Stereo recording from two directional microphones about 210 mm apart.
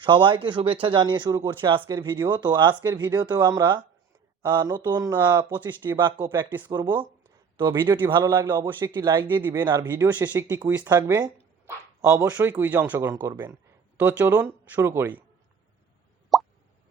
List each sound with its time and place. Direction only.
0.0 s a man's voice: 25° right (ahead or behind)
6.7 s speech: 20° right (ahead or behind)
7.7 s a man's voice: 10° right (ahead or behind)
16.3 s plop: centre (ahead or behind)